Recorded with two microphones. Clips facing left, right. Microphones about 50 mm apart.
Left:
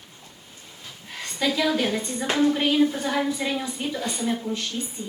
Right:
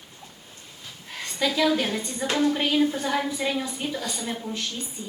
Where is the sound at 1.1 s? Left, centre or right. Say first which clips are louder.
Left 1 dB; centre.